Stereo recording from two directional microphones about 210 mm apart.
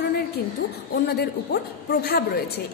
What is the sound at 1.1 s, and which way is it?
A woman's voice, 50° left (ahead or behind).